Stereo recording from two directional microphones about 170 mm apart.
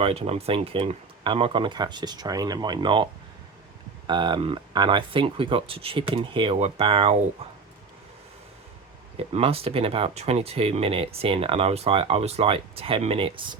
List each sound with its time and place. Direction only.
0.0 s speech: 35° right (ahead or behind)
9.1 s speech: 35° right (ahead or behind)